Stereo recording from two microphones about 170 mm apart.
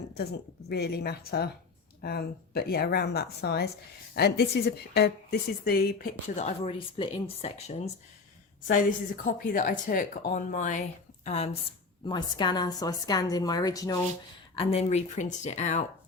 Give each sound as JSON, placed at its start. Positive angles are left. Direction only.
{"t": 0.1, "sound": "a woman's voice", "side_deg": 70}
{"t": 8.6, "sound": "speech", "side_deg": 50}
{"t": 12.0, "sound": "a woman's voice", "side_deg": 25}
{"t": 14.5, "sound": "speech", "side_deg": 35}